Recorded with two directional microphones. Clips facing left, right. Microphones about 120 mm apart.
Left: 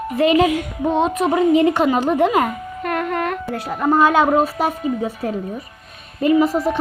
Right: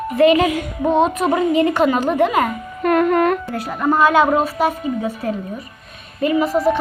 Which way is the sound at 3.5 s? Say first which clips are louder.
Left 1 dB; 20° left (ahead or behind).